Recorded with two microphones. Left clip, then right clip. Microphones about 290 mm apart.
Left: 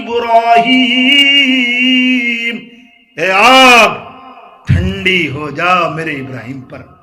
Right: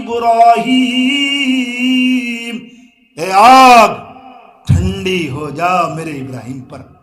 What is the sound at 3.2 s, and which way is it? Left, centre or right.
A man's voice, centre.